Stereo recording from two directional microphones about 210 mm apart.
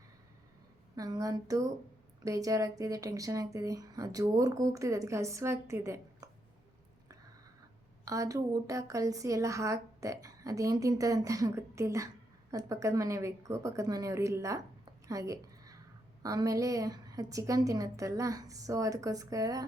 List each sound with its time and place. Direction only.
0.9 s a woman's voice: 15° right (ahead or behind)
8.0 s a woman's voice: 15° right (ahead or behind)
15.0 s a sound: 15° right (ahead or behind)
16.2 s a woman's voice: 15° right (ahead or behind)